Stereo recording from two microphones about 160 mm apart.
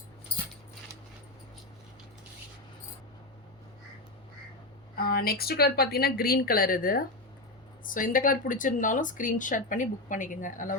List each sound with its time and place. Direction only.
4.9 s speech: 70° left (ahead or behind); by 10.8 s 55° left (ahead or behind)